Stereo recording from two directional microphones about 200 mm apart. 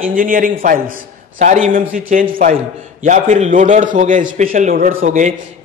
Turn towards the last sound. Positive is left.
turn(degrees=-40)  # may be behind; listen again after turning